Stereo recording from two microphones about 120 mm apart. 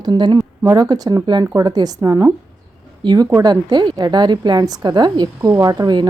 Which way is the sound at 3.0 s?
40° right (ahead or behind).